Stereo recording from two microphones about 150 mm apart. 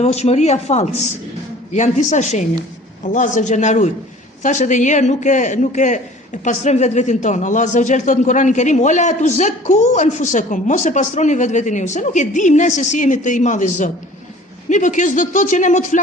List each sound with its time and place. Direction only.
0.0 s a man's voice: 45° left (ahead or behind)